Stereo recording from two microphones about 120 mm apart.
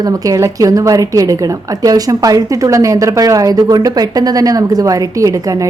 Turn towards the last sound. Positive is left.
turn(degrees=-25)  # may be behind; listen again after turning